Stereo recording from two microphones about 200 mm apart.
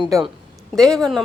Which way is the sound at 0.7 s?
5° left (ahead or behind).